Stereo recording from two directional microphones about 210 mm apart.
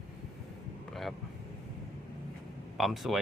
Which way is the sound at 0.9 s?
Centre (ahead or behind).